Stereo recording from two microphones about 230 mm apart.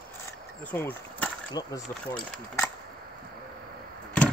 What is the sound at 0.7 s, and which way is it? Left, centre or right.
Speech, centre.